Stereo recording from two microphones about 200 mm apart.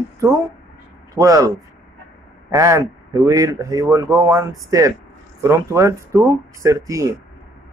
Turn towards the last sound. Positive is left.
turn(degrees=-15)  # may be behind; listen again after turning